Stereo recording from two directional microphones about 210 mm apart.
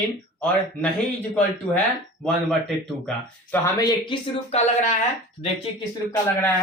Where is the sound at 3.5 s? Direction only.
15° left (ahead or behind); by 5.0 s 30° left (ahead or behind).